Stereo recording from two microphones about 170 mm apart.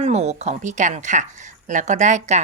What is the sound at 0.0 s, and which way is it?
Speech, 40° right (ahead or behind).